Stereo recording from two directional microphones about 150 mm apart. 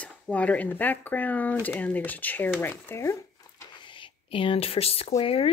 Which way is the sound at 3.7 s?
35° left (ahead or behind).